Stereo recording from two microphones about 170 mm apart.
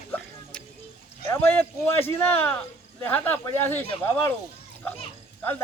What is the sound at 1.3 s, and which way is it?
A man's voice, 10° left (ahead or behind).